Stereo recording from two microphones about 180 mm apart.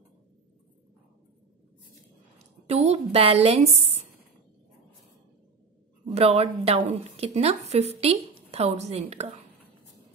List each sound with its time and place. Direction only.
2.6 s a woman's voice: 35° right (ahead or behind)
6.0 s a woman's voice: 35° right (ahead or behind)